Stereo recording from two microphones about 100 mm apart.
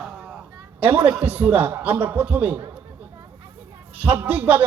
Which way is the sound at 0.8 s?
15° right (ahead or behind).